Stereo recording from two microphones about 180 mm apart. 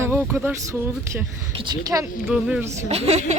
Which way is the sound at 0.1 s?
10° right (ahead or behind).